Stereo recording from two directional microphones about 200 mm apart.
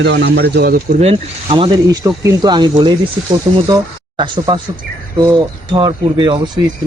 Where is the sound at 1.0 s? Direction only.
30° right (ahead or behind).